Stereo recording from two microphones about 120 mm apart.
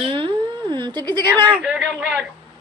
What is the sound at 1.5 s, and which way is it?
Speech, 10° right (ahead or behind).